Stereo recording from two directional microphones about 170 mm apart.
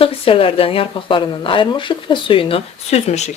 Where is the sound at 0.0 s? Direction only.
30° left (ahead or behind).